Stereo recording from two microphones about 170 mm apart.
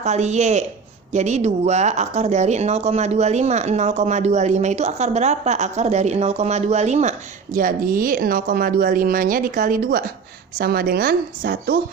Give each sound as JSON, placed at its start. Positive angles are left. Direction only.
{"t": 0.0, "sound": "speech", "side_deg": -40}